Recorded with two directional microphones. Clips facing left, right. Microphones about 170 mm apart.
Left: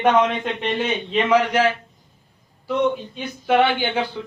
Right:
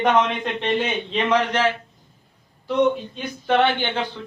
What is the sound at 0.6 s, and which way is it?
Speech, 5° left (ahead or behind).